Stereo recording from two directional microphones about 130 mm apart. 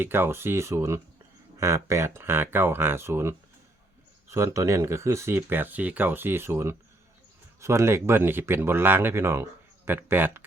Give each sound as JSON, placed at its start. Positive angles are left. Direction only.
{"t": 0.0, "sound": "speech", "side_deg": -15}